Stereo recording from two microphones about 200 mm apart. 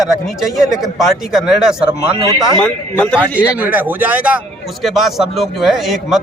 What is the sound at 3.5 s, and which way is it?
A man's voice, 10° right (ahead or behind).